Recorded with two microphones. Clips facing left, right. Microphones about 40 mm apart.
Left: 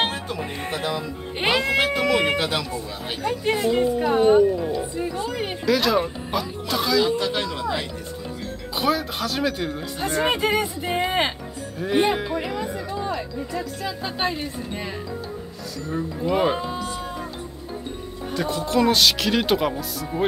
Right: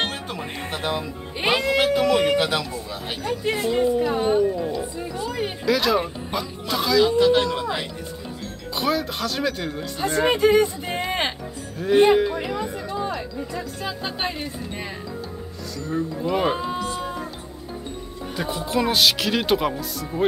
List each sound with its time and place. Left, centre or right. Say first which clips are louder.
0.7 s speech: even; right
1.8 s speech: right 1 dB; centre
2.7 s speech: left 1 dB; centre
5.7 s speech: left 1 dB; centre
7.2 s speech: right 7 dB; centre
8.7 s speech: left 1 dB; centre
13.8 s speech: left 1 dB; centre
15.9 s speech: even; centre
16.9 s music: right 2 dB; centre
18.3 s speech: left 2 dB; centre